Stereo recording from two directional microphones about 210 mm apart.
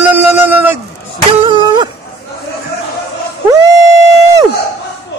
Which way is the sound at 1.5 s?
20° right (ahead or behind).